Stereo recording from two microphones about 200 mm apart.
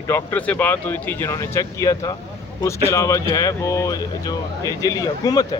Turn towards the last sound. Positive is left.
turn(degrees=20)  # may be behind; listen again after turning